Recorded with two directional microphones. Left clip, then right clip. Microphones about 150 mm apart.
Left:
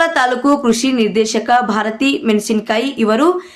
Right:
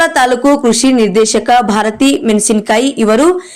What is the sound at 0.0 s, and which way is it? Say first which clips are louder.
A woman's voice: right 4 dB; 35° right (ahead or behind).